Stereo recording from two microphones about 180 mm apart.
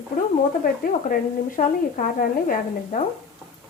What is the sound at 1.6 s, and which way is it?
A woman's voice, 50° left (ahead or behind).